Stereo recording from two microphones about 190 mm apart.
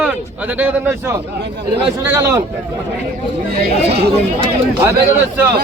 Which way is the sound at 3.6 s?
60° right (ahead or behind).